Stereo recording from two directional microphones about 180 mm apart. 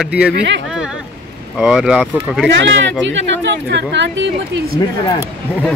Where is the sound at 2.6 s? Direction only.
90° right.